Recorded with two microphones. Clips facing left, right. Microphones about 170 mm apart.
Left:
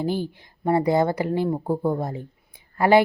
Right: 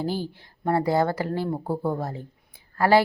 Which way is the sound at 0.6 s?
15° left (ahead or behind).